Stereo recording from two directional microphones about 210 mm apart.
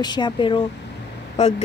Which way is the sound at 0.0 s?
20° left (ahead or behind).